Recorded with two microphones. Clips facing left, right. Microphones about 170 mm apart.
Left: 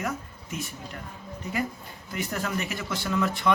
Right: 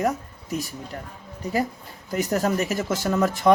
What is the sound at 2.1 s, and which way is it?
Speech, 40° right (ahead or behind).